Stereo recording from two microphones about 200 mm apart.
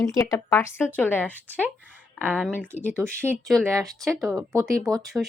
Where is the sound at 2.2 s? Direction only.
5° right (ahead or behind).